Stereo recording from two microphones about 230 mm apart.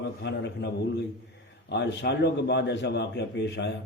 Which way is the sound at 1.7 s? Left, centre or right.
Left.